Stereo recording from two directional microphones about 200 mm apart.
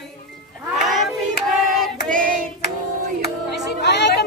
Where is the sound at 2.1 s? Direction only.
40° right (ahead or behind).